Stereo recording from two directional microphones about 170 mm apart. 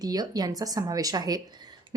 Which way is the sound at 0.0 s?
20° right (ahead or behind).